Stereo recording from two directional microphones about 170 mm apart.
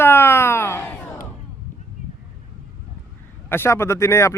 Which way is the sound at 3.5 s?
15° left (ahead or behind).